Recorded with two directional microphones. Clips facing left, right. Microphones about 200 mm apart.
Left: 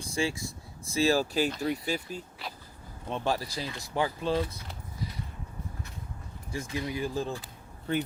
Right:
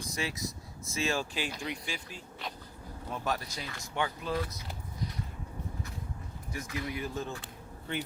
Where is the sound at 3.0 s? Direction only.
25° left (ahead or behind).